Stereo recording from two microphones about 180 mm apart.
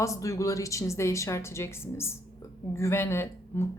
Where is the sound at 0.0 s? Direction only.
15° left (ahead or behind).